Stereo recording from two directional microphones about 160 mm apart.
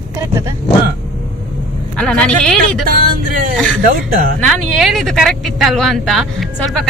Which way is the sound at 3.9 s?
70° right (ahead or behind).